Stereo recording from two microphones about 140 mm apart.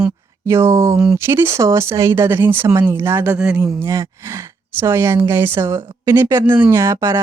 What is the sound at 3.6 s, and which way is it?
Speech, 20° right (ahead or behind).